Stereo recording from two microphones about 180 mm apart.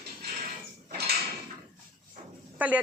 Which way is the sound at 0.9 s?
65° right (ahead or behind).